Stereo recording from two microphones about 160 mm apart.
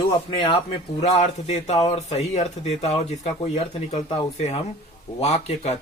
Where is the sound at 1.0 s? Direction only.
45° left (ahead or behind).